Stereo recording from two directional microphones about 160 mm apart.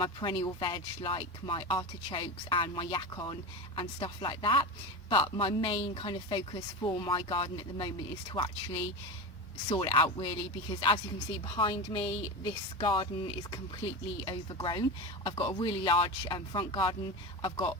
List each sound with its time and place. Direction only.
0.0 s speech: 30° left (ahead or behind)
9.6 s speech: 30° left (ahead or behind)